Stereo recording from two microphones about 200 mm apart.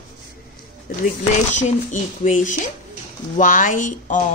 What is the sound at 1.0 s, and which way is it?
A woman's voice, 35° left (ahead or behind).